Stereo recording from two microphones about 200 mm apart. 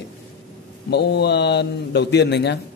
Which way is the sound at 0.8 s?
55° left (ahead or behind).